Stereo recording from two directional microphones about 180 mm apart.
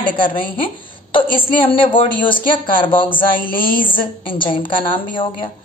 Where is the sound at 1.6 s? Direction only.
30° left (ahead or behind).